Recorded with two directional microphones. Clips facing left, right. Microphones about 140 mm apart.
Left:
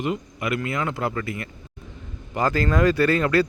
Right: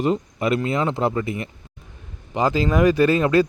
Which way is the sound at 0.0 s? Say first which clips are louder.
Right 5 dB; 35° right (ahead or behind).